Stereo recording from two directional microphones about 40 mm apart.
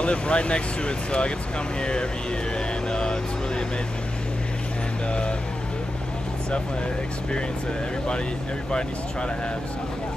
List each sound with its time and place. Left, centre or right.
0.0 s speech: left
2.9 s vehicle: left